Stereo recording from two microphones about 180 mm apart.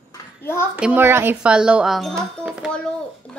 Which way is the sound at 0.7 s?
10° right (ahead or behind).